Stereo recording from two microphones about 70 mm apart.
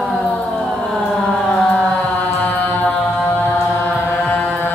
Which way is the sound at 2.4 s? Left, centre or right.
Left.